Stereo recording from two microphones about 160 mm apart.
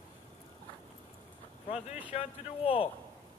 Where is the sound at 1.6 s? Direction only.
40° left (ahead or behind).